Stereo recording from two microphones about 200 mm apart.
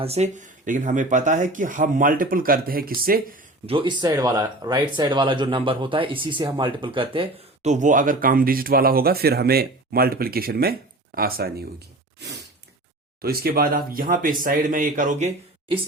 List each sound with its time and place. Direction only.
0.0 s speech: 35° right (ahead or behind)
3.7 s speech: 25° right (ahead or behind); by 11.5 s 50° right (ahead or behind)
13.2 s speech: 50° right (ahead or behind)